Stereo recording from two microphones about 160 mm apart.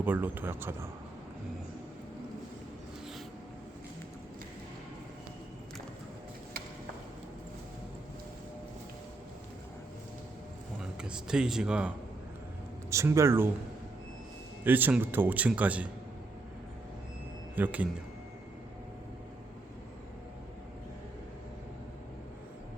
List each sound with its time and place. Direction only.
0.0 s a man's voice: 10° right (ahead or behind)
10.8 s speech: 5° right (ahead or behind)
12.9 s a man's voice: 20° right (ahead or behind)
14.6 s a man's voice: 10° right (ahead or behind)
17.5 s speech: 10° right (ahead or behind)